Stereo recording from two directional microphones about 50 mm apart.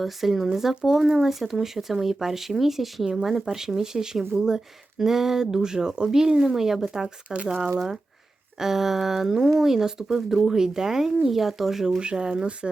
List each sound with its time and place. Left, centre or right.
0.0 s speech: centre
7.3 s speech: right
8.5 s speech: centre